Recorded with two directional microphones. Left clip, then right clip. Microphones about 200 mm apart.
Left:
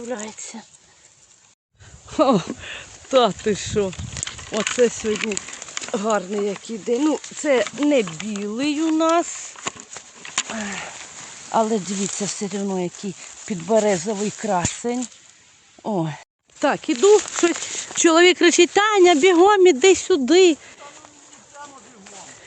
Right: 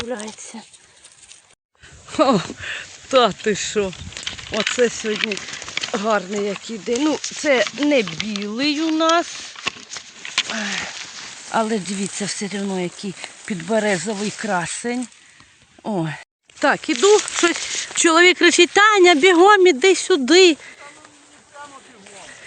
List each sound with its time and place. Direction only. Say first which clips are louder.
0.1 s speech: right 1 dB; 15° right (ahead or behind)
2.0 s speech: right 1 dB; centre (ahead or behind)
8.0 s speech: right 4 dB; 35° left (ahead or behind)
8.4 s speech: right 1 dB; 5° right (ahead or behind)
10.5 s speech: right 5 dB; centre (ahead or behind)
17.6 s speech: right 4 dB; 35° left (ahead or behind)
17.8 s speech: right 1 dB; 15° left (ahead or behind)
19.6 s speech: even; 10° left (ahead or behind)
20.1 s speech: right 2 dB; centre (ahead or behind)
21.6 s a sound: right 1 dB; 60° left (ahead or behind)